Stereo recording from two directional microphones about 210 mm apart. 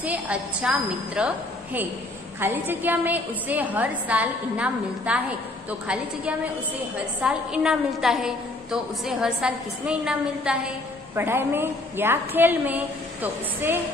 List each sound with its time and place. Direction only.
0.0 s a woman's voice: 5° right (ahead or behind)